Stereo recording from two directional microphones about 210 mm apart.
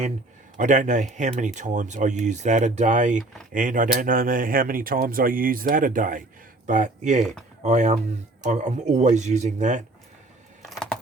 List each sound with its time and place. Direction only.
0.5 s speech: 35° right (ahead or behind)
10.6 s computer keyboard: centre (ahead or behind)